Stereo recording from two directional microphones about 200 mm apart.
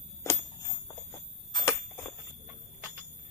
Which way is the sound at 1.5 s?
15° left (ahead or behind).